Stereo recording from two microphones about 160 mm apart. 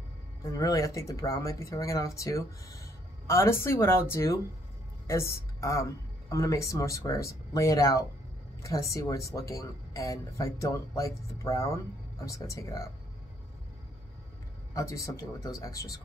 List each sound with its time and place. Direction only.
0.5 s speech: 20° left (ahead or behind)
14.7 s speech: 20° left (ahead or behind)